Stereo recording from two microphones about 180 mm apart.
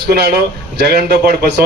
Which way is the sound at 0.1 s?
60° right (ahead or behind).